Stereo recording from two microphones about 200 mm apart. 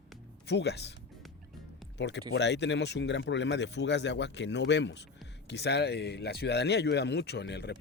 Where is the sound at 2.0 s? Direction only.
60° left (ahead or behind).